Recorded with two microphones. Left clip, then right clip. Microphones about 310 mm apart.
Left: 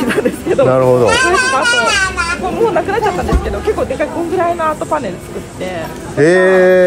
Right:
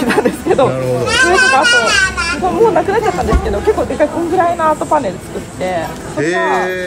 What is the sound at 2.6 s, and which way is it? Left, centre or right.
Speech, right.